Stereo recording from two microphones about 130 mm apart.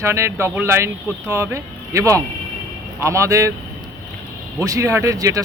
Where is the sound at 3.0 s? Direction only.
25° right (ahead or behind).